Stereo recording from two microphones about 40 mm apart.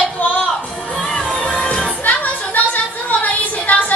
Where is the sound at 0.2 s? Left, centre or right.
Left.